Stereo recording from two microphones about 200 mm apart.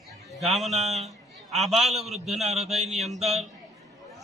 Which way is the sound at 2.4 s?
30° right (ahead or behind).